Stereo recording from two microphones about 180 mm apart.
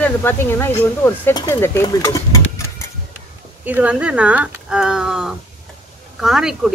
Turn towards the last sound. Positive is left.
turn(degrees=-5)  # may be behind; listen again after turning